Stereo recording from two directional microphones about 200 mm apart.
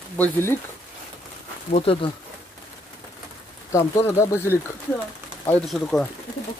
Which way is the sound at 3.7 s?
15° left (ahead or behind).